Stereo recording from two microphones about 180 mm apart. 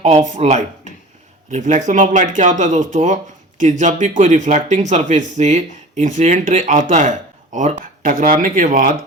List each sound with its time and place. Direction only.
0.3 s speech: 40° right (ahead or behind)